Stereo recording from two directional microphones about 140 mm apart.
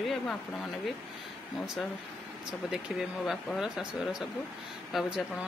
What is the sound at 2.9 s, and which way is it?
Speech, centre (ahead or behind).